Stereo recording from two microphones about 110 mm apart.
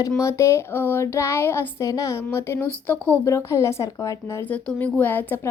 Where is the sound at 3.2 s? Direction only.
25° left (ahead or behind).